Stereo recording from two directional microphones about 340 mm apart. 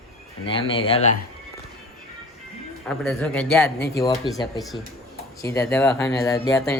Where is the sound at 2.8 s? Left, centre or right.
Centre.